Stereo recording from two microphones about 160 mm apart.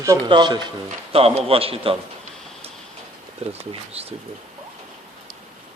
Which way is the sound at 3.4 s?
40° right (ahead or behind).